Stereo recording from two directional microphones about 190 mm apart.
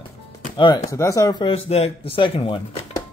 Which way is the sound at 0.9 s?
15° left (ahead or behind).